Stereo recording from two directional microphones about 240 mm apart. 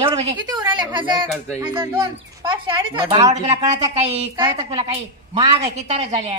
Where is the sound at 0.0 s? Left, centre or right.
Centre.